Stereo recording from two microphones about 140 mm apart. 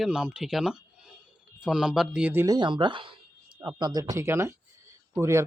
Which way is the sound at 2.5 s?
35° right (ahead or behind).